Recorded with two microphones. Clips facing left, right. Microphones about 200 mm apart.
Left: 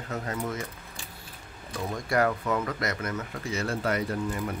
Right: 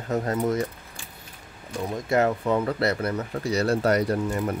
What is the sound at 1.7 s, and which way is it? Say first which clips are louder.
Speech: right 3 dB; 20° right (ahead or behind).